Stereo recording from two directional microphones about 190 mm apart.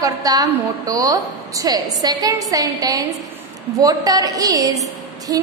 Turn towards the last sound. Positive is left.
turn(degrees=-20)  # may be behind; listen again after turning